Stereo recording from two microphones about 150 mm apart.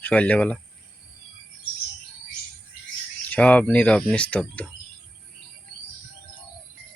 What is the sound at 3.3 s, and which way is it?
Speech, 10° left (ahead or behind).